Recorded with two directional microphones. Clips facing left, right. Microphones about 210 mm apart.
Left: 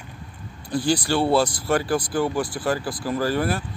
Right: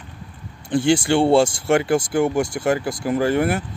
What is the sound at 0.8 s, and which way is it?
Speech, 25° right (ahead or behind).